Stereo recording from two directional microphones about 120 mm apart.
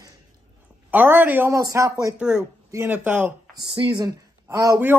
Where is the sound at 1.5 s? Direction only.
25° right (ahead or behind).